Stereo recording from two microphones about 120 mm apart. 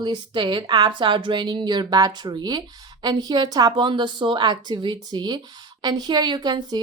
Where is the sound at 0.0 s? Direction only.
40° right (ahead or behind).